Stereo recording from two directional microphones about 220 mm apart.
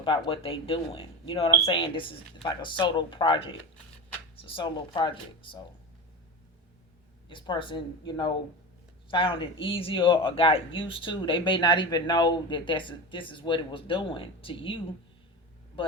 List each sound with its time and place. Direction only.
0.3 s speech: 25° left (ahead or behind)
7.3 s speech: 20° left (ahead or behind)